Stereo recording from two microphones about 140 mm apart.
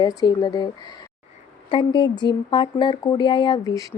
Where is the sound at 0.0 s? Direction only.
30° left (ahead or behind).